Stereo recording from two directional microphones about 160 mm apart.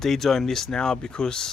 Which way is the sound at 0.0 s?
Centre (ahead or behind).